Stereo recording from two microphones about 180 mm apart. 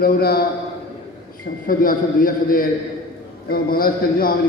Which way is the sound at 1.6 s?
50° left (ahead or behind).